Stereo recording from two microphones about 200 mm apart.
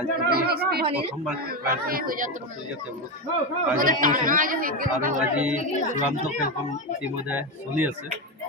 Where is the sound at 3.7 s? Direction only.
45° right (ahead or behind).